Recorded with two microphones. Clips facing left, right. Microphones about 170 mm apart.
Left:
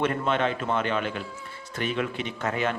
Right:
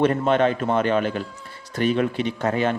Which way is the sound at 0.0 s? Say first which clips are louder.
Right 6 dB; 40° right (ahead or behind).